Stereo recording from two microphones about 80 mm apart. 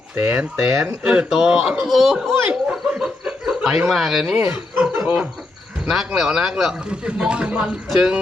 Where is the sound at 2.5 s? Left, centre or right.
Centre.